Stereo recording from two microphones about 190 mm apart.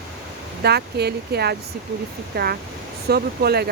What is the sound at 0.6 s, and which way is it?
Speech, 60° right (ahead or behind).